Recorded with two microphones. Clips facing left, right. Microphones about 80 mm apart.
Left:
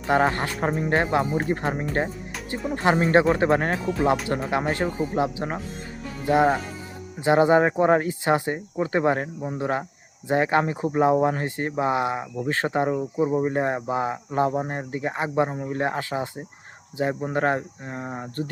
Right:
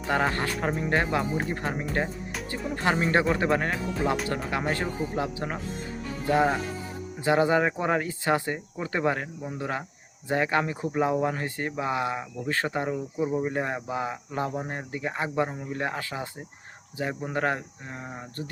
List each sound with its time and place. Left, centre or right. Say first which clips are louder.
0.1 s speech: left 5 dB; left
4.3 s speech: left 4 dB; left